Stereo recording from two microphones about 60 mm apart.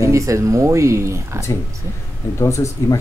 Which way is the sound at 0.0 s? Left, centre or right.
Right.